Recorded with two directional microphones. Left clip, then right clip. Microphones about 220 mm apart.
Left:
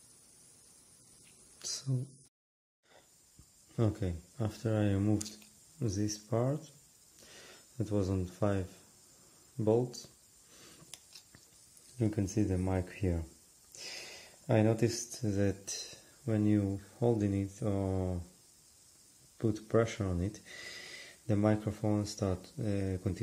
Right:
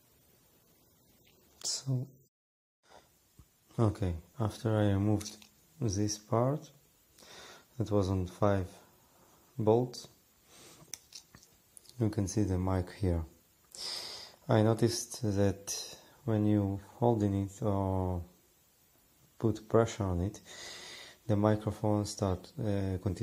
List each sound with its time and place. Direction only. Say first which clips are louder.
3.7 s speech: right 2 dB; 5° right (ahead or behind)
12.0 s speech: even; centre (ahead or behind)
19.3 s speech: right 2 dB; 5° right (ahead or behind)